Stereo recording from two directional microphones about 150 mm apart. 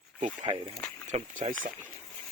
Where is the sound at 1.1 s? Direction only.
50° right (ahead or behind).